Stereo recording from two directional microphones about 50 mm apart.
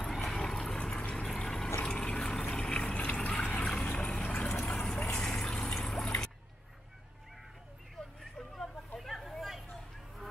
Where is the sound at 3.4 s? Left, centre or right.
Left.